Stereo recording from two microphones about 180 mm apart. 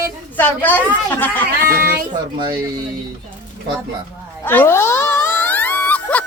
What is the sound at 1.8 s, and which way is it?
Speech, 55° right (ahead or behind).